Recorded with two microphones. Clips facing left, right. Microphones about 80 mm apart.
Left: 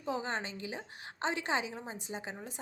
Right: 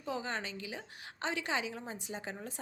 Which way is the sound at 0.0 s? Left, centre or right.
Left.